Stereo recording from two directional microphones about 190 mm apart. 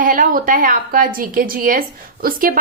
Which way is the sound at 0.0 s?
50° right (ahead or behind).